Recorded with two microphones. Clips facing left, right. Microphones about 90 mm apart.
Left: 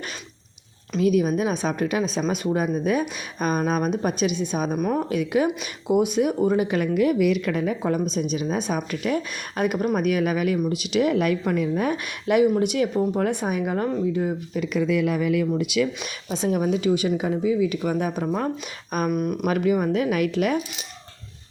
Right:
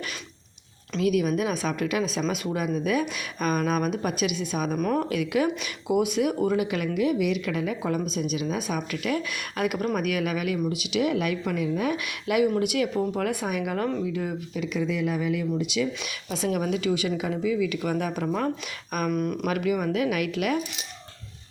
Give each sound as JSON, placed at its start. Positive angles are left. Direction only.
{"t": 0.9, "sound": "speech", "side_deg": 30}
{"t": 14.5, "sound": "speech", "side_deg": 50}
{"t": 16.3, "sound": "speech", "side_deg": 25}
{"t": 19.1, "sound": "speech", "side_deg": 15}
{"t": 19.5, "sound": "speech", "side_deg": 35}